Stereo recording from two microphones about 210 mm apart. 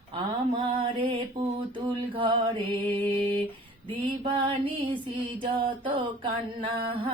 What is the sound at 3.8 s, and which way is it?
Mantra, 25° right (ahead or behind).